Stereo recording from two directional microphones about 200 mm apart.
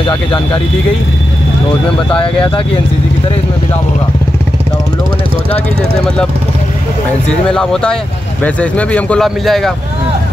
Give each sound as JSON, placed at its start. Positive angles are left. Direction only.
{"t": 0.0, "sound": "speech", "side_deg": 25}
{"t": 2.1, "sound": "speech", "side_deg": 25}
{"t": 7.4, "sound": "speech", "side_deg": 5}